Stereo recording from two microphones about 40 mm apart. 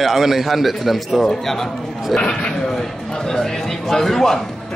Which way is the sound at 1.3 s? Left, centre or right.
Centre.